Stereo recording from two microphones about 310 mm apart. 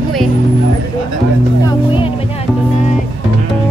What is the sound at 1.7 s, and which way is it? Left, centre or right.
Music, centre.